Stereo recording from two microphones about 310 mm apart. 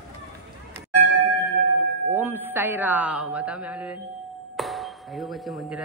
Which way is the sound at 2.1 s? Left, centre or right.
Centre.